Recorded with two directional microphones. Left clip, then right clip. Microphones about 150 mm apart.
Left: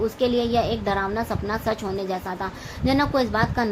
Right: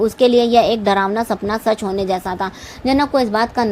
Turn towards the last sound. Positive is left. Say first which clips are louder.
# right 6 dB
turn(degrees=-40)  # may be behind; listen again after turning